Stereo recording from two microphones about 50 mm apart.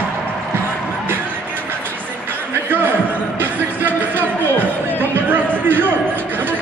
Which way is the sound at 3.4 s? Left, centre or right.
Right.